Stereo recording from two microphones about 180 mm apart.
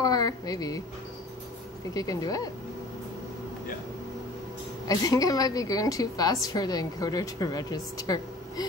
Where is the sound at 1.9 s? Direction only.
20° left (ahead or behind).